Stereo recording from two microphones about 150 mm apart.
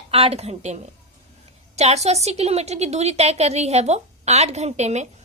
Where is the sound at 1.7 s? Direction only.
45° right (ahead or behind).